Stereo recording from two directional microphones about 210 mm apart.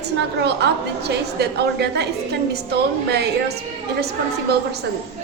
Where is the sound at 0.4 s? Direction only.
50° right (ahead or behind).